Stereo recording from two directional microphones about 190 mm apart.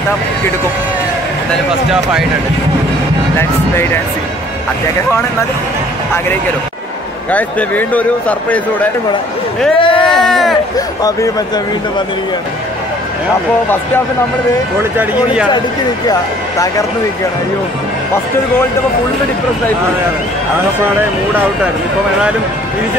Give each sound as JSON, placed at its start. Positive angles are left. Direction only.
{"t": 3.3, "sound": "a man's voice", "side_deg": 10}
{"t": 7.2, "sound": "a man's voice", "side_deg": 10}
{"t": 9.8, "sound": "a sound", "side_deg": 25}
{"t": 10.3, "sound": "a sound", "side_deg": 0}
{"t": 11.0, "sound": "speech", "side_deg": 20}
{"t": 14.8, "sound": "speech", "side_deg": -10}
{"t": 16.1, "sound": "a man's voice", "side_deg": 15}